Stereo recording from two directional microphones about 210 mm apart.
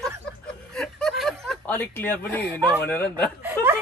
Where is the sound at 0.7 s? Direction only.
Centre (ahead or behind).